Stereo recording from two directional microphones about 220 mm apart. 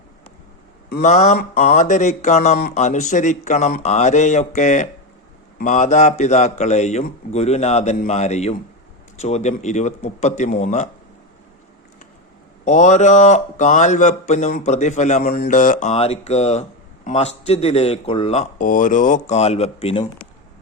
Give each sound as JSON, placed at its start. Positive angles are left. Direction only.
{"t": 1.0, "sound": "speech", "side_deg": 30}
{"t": 12.6, "sound": "speech", "side_deg": 35}